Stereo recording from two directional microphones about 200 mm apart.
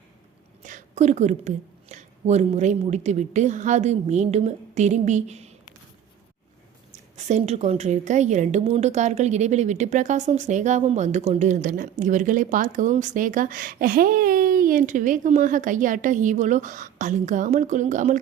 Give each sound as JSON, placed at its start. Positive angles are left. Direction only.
{"t": 0.6, "sound": "a woman's voice", "side_deg": -40}
{"t": 7.2, "sound": "a woman's voice", "side_deg": -35}